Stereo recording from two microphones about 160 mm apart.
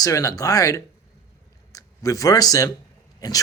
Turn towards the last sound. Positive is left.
turn(degrees=25)  # may be behind; listen again after turning